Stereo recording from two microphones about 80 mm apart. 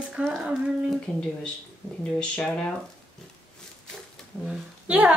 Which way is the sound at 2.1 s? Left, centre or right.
Centre.